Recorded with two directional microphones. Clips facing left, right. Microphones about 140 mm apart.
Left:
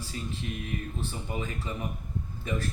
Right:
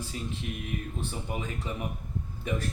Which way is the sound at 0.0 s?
15° right (ahead or behind).